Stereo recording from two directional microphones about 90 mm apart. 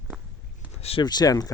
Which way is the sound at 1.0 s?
50° left (ahead or behind).